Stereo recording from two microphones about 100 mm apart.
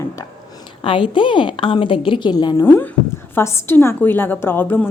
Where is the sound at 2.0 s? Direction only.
50° left (ahead or behind).